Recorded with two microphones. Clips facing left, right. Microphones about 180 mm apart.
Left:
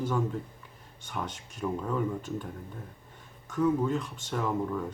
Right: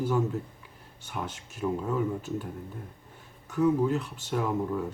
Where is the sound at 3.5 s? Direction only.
5° right (ahead or behind).